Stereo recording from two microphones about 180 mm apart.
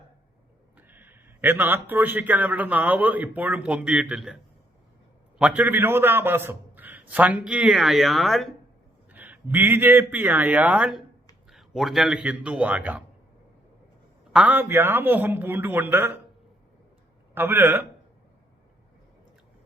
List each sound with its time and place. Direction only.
0.8 s a man's voice: 10° right (ahead or behind)
5.4 s a man's voice: 5° right (ahead or behind)
14.3 s a man's voice: 10° right (ahead or behind)
17.3 s a man's voice: 10° right (ahead or behind)